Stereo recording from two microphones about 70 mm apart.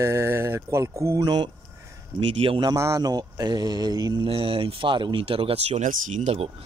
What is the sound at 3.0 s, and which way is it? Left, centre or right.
Speech, right.